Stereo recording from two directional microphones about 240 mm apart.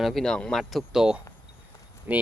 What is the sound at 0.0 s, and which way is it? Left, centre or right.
Speech, centre.